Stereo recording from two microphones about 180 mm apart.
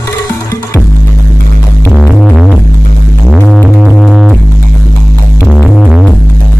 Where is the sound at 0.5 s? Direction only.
15° left (ahead or behind).